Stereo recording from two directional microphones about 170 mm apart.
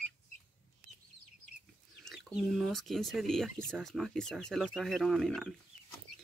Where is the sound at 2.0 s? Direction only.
Centre (ahead or behind).